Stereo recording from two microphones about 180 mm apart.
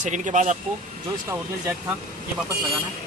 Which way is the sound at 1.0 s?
15° right (ahead or behind).